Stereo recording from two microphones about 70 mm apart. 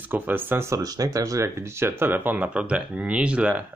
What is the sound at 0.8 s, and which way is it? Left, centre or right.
Speech, right.